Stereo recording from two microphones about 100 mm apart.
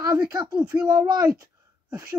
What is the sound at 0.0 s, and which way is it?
Speech, 45° right (ahead or behind).